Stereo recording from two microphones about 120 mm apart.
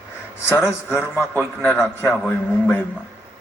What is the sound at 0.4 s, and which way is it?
Speech, 20° left (ahead or behind).